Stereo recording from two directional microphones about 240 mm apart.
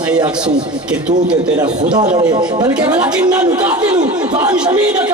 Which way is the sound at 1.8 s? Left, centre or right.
Centre.